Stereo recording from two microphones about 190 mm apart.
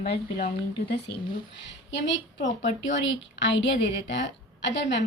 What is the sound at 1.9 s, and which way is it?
A woman's voice, 70° left (ahead or behind).